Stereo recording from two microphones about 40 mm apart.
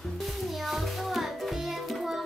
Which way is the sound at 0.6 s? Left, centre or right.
Centre.